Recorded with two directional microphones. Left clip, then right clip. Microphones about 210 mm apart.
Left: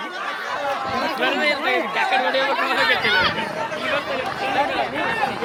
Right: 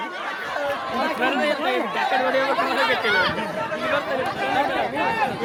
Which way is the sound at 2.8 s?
55° right (ahead or behind).